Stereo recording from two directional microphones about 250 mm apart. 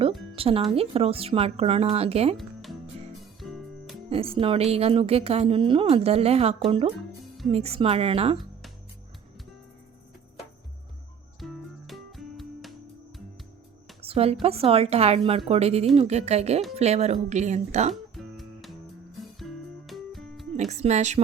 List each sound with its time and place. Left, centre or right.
0.3 s a woman's voice: right
2.4 s music: centre
4.1 s a woman's voice: right
11.3 s music: centre
14.0 s a sound: right
14.4 s a woman's voice: right
18.1 s music: centre
20.6 s a woman's voice: right